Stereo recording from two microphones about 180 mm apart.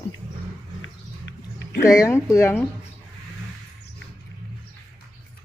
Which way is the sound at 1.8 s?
15° left (ahead or behind).